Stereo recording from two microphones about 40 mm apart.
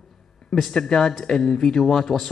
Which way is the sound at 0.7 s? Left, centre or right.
Centre.